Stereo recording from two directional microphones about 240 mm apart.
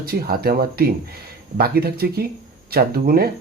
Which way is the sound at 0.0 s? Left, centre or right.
Right.